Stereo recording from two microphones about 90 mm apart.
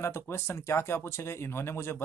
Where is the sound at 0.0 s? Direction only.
30° left (ahead or behind).